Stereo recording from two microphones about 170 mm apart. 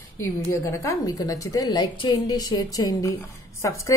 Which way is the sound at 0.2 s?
15° left (ahead or behind).